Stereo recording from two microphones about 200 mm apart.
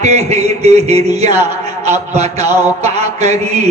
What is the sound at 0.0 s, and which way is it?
A man's voice, 35° right (ahead or behind).